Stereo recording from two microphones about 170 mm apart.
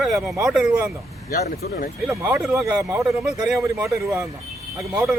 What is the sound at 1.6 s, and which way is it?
Speech, 65° left (ahead or behind).